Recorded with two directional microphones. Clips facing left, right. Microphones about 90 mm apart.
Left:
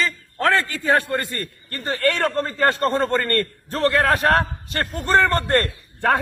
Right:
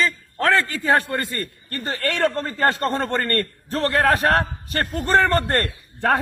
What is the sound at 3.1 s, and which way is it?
A man's voice, 35° right (ahead or behind).